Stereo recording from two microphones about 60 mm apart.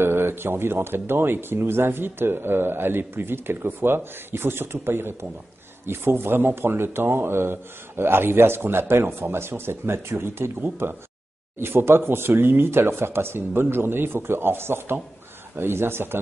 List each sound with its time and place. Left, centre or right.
0.0 s speech: right